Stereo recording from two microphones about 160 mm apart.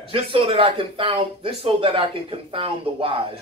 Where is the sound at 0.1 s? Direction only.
35° right (ahead or behind).